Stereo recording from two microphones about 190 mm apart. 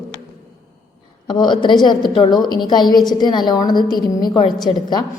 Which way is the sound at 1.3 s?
25° left (ahead or behind).